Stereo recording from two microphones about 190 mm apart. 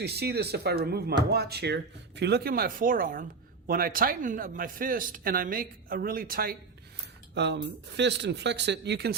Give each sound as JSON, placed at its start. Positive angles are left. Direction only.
{"t": 0.0, "sound": "speech", "side_deg": -60}
{"t": 7.3, "sound": "speech", "side_deg": -65}